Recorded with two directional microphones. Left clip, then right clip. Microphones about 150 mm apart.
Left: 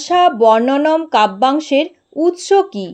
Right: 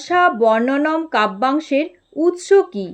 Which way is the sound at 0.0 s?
25° left (ahead or behind).